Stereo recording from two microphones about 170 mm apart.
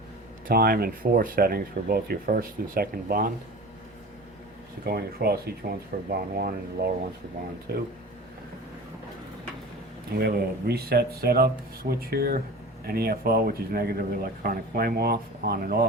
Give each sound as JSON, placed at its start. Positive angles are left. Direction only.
{"t": 0.4, "sound": "speech", "side_deg": -60}
{"t": 4.9, "sound": "speech", "side_deg": -65}
{"t": 10.2, "sound": "speech", "side_deg": -70}